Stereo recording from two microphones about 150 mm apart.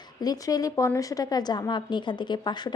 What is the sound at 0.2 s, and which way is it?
A woman's voice, 25° left (ahead or behind).